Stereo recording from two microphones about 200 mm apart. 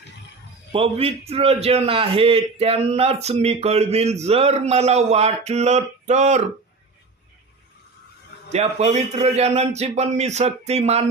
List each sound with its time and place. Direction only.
0.7 s a man's voice: 30° right (ahead or behind)
8.4 s a man's voice: 35° right (ahead or behind)